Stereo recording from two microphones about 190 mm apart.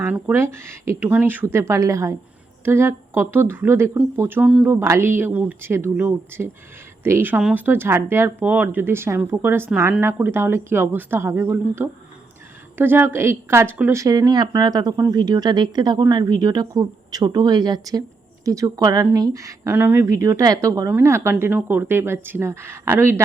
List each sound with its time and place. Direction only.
0.0 s a woman's voice: 10° right (ahead or behind)